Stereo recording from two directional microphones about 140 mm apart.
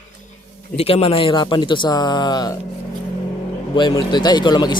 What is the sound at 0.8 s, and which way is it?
Speech, 45° left (ahead or behind).